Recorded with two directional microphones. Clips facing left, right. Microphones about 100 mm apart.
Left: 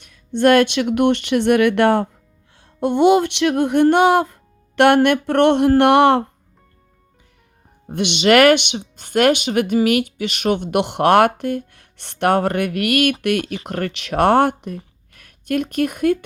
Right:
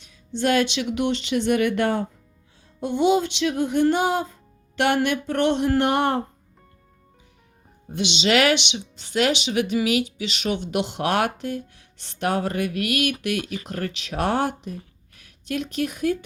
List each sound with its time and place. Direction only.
0.0 s speech: 60° left (ahead or behind); by 6.2 s 85° left
7.9 s speech: 55° left (ahead or behind)